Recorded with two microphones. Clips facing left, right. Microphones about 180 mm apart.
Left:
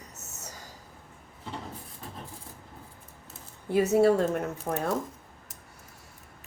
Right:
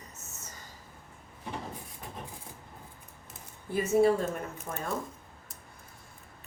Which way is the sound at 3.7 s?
70° left (ahead or behind).